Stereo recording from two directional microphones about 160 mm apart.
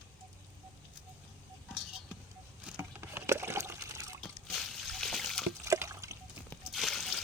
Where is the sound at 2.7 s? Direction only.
15° right (ahead or behind).